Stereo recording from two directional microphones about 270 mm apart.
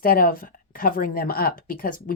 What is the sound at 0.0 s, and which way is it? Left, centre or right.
Speech, left.